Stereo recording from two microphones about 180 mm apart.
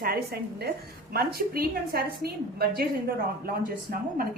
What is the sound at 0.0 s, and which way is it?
A woman's voice, 60° right (ahead or behind).